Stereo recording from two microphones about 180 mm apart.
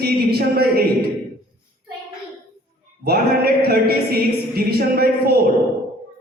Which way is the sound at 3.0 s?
60° right (ahead or behind).